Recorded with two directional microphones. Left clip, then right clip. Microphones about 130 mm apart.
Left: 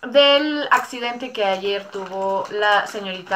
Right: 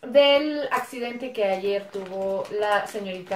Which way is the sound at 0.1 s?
30° right (ahead or behind).